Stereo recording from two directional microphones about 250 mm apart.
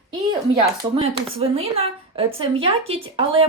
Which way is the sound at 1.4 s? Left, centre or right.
Right.